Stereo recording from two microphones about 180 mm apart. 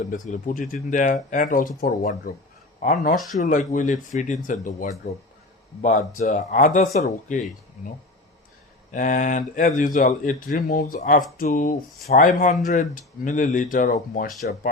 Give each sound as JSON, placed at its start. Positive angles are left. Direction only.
{"t": 0.1, "sound": "speech", "side_deg": 45}
{"t": 8.9, "sound": "speech", "side_deg": 45}